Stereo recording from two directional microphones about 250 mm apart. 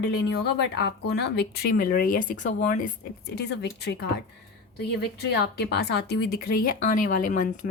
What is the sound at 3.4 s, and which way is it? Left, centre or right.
Speech, left.